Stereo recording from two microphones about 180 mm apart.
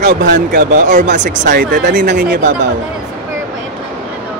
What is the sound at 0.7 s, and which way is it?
Speech, 45° right (ahead or behind).